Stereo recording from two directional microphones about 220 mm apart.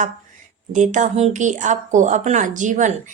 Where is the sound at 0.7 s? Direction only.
35° right (ahead or behind).